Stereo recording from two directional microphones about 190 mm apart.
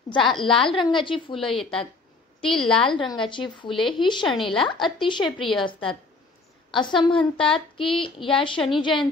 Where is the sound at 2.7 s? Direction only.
25° left (ahead or behind).